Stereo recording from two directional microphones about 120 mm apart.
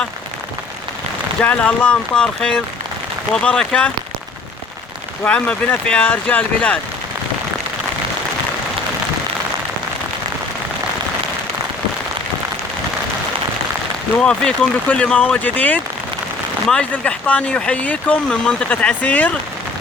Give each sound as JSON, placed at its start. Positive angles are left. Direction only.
{"t": 1.4, "sound": "speech", "side_deg": 10}
{"t": 5.2, "sound": "speech", "side_deg": 10}
{"t": 14.2, "sound": "speech", "side_deg": 5}